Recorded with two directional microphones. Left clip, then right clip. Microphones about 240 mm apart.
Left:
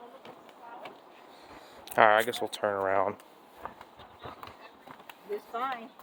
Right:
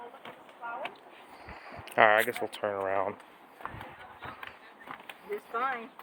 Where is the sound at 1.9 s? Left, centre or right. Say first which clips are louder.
Left 1 dB; centre.